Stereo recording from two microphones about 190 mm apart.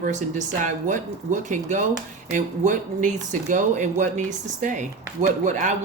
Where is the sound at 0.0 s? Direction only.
40° right (ahead or behind).